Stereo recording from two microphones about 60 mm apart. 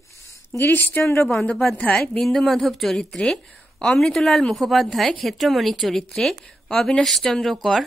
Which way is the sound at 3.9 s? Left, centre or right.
Centre.